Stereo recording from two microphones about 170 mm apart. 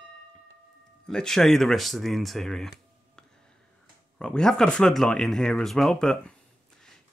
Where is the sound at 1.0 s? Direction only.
5° left (ahead or behind).